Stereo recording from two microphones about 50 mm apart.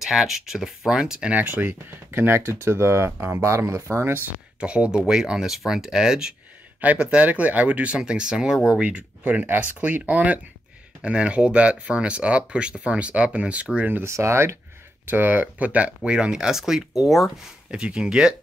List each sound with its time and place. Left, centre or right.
0.0 s speech: centre
1.3 s speech: right
4.6 s speech: right
6.8 s speech: right
11.0 s speech: right
14.0 s speech: right
15.0 s speech: right
16.1 s speech: centre
17.6 s speech: centre